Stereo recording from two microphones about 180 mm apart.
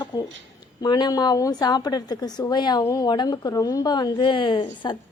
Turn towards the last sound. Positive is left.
turn(degrees=25)  # may be behind; listen again after turning